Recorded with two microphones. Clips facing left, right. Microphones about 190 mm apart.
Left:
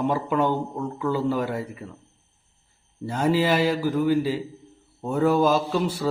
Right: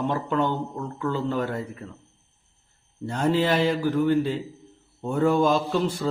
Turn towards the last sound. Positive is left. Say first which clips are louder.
# even
turn(degrees=5)  # may be behind; listen again after turning